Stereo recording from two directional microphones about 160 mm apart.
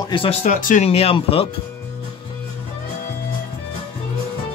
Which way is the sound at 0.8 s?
40° left (ahead or behind).